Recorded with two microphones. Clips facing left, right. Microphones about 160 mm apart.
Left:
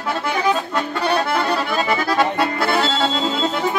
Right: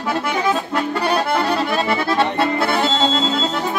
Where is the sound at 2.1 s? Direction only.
20° right (ahead or behind).